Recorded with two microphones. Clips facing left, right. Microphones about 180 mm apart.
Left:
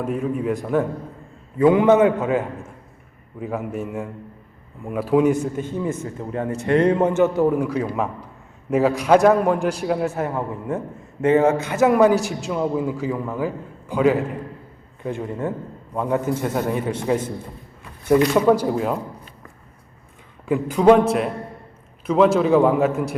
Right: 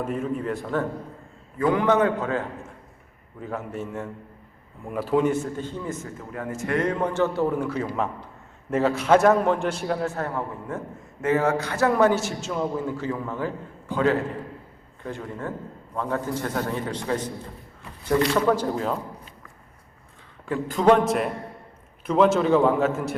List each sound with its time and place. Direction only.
0.0 s a man's voice: 5° left (ahead or behind)
6.1 s a man's voice: 25° left (ahead or behind)
7.5 s a man's voice: 10° left (ahead or behind)
10.8 s a man's voice: 25° left (ahead or behind); by 18.9 s 10° left (ahead or behind)
20.5 s a man's voice: 10° left (ahead or behind)